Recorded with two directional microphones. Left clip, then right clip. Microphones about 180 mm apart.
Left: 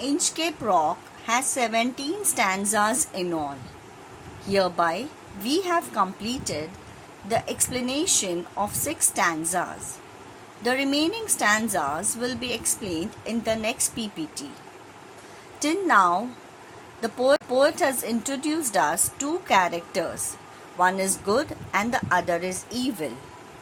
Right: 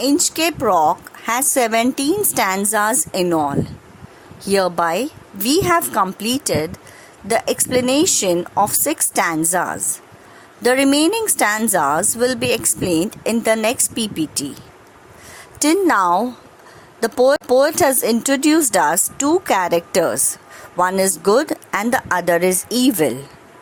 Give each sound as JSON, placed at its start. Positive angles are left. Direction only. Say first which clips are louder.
{"t": 0.0, "sound": "speech", "louder": "right 9 dB", "side_deg": -60}
{"t": 15.5, "sound": "a woman's voice", "louder": "right 5 dB", "side_deg": -55}